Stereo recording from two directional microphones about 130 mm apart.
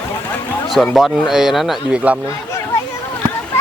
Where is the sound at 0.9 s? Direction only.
5° right (ahead or behind).